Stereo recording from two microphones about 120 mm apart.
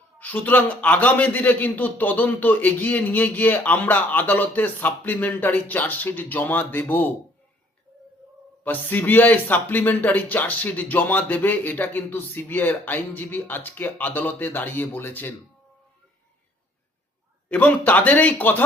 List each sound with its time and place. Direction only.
0.2 s a man's voice: 15° left (ahead or behind)
8.6 s a man's voice: 15° left (ahead or behind)
17.5 s a man's voice: 15° left (ahead or behind)